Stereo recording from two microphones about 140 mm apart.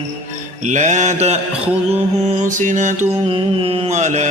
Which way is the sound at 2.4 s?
65° right (ahead or behind).